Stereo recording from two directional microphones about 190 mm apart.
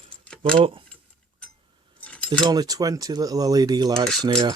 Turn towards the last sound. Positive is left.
turn(degrees=-20)  # may be behind; listen again after turning